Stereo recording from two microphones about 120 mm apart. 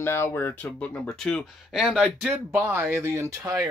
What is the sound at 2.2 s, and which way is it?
Speech, 20° right (ahead or behind).